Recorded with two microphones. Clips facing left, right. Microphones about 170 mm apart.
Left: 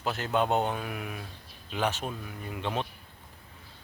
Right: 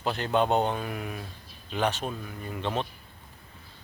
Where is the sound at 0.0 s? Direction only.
5° left (ahead or behind).